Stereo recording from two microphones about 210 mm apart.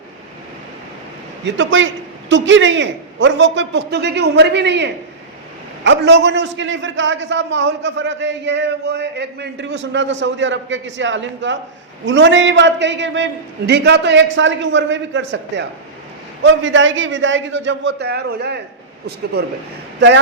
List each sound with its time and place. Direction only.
1.5 s a man's voice: 65° right (ahead or behind)